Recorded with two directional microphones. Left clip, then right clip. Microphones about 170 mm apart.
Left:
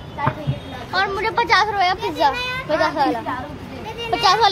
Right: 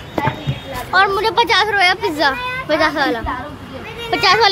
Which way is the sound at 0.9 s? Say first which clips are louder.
Right 6 dB; 45° right (ahead or behind).